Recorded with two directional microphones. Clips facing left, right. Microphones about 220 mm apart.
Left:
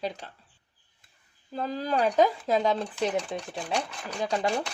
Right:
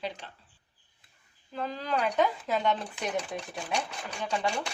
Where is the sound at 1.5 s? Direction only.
35° left (ahead or behind).